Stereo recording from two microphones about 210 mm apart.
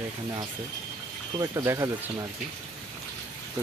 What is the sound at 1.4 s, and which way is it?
Speech, 15° right (ahead or behind).